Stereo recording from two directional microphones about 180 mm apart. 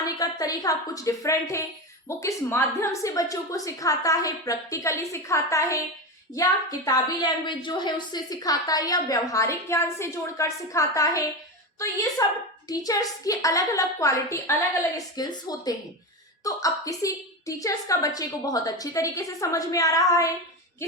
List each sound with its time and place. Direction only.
0.0 s a woman's voice: 20° left (ahead or behind)